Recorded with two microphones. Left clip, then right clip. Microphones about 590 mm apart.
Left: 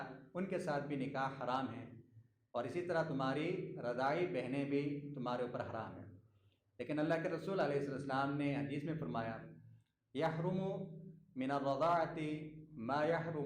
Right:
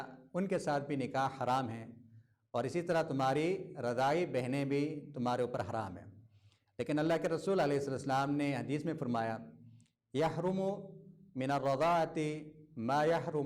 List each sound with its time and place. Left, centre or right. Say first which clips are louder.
0.3 s speech: right 5 dB; right